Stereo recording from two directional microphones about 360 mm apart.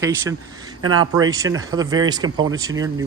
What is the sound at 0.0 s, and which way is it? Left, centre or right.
Speech, centre.